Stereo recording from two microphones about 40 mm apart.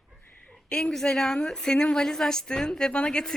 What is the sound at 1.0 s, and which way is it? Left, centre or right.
Speech, centre.